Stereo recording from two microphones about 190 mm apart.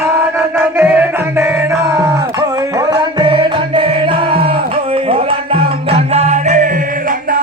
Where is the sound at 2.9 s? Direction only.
25° right (ahead or behind).